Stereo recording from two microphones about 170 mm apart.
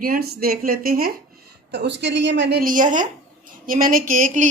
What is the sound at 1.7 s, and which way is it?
A woman's voice, 90° right.